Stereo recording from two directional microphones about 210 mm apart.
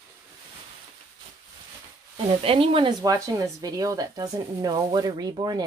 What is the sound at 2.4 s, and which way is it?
Speech, 25° right (ahead or behind).